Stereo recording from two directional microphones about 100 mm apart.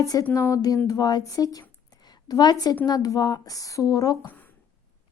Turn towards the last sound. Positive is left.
turn(degrees=35)  # may be behind; listen again after turning